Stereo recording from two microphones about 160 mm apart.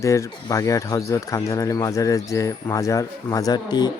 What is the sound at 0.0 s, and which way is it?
Speech, 20° left (ahead or behind).